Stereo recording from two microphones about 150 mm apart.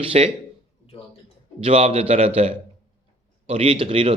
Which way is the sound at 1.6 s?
45° right (ahead or behind).